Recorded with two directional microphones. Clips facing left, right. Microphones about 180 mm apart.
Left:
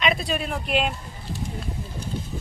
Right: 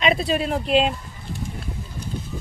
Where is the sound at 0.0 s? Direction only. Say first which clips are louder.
Right 4 dB; 30° right (ahead or behind).